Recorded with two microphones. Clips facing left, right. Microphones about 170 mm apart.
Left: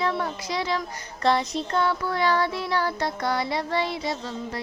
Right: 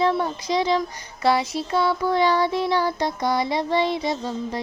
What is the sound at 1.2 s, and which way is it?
Child singing, 5° right (ahead or behind).